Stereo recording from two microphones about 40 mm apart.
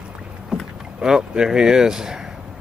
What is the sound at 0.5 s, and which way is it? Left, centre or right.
Rowboat, centre.